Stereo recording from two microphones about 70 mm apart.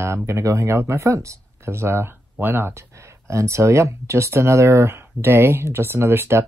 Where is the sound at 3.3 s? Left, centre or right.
Right.